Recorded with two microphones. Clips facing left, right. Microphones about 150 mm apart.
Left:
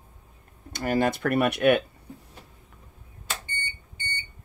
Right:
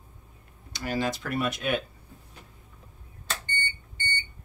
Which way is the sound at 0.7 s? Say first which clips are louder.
Left 5 dB; 55° left (ahead or behind).